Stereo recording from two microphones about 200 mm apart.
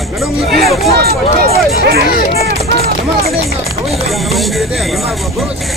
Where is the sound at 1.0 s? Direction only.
50° right (ahead or behind).